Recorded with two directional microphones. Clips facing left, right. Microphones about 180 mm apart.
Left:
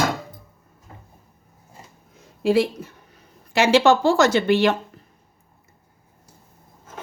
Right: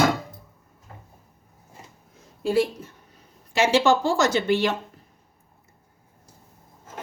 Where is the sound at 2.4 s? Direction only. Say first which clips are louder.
Left 3 dB; 90° left.